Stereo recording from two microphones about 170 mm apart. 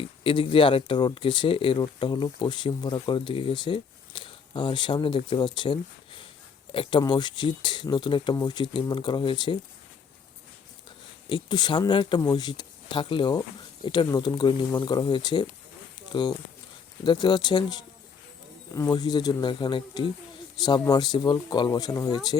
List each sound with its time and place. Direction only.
0.0 s speech: 30° left (ahead or behind)
11.3 s speech: 25° left (ahead or behind)